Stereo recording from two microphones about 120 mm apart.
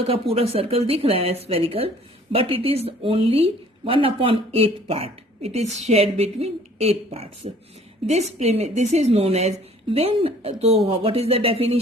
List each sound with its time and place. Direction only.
0.1 s a woman's voice: 55° right (ahead or behind)